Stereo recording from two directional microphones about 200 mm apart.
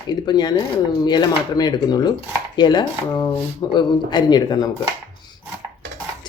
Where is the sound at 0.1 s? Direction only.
20° left (ahead or behind).